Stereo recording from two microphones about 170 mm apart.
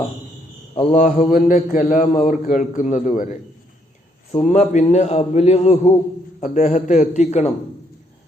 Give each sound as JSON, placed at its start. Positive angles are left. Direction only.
{"t": 0.9, "sound": "a man's voice", "side_deg": 55}